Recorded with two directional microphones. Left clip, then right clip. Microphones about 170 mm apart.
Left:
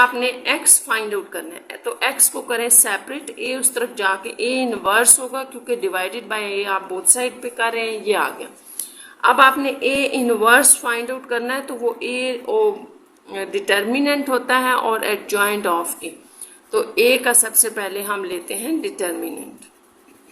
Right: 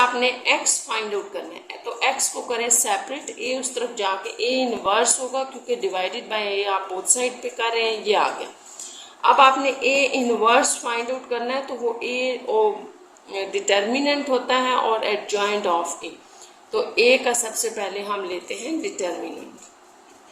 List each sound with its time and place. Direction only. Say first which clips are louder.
0.0 s a woman's voice: left 2 dB; 50° left (ahead or behind)
9.2 s speech: left 2 dB; 50° left (ahead or behind)